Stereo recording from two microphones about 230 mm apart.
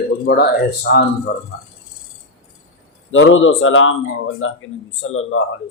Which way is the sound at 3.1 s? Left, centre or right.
Left.